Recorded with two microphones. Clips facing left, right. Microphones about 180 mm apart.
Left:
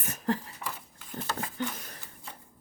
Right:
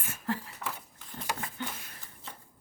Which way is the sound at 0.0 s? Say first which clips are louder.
Left 4 dB; 40° left (ahead or behind).